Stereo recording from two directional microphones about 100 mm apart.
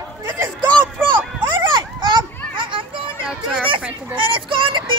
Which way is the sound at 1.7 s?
50° right (ahead or behind).